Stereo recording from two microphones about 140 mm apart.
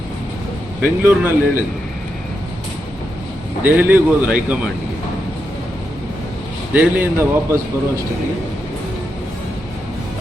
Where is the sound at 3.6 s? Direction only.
15° right (ahead or behind).